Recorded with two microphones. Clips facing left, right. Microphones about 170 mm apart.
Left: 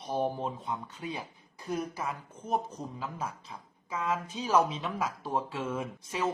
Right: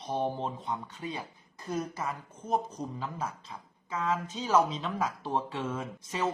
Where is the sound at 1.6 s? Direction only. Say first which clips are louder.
Even; 10° left (ahead or behind).